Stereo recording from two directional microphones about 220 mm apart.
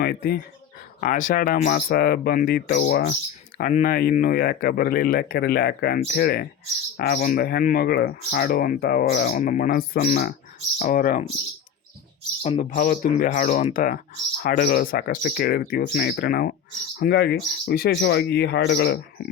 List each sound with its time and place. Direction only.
0.0 s speech: 45° left (ahead or behind)
12.4 s speech: 35° left (ahead or behind)